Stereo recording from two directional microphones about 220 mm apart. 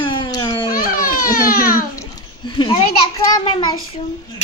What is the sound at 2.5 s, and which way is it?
A child's voice, 20° left (ahead or behind).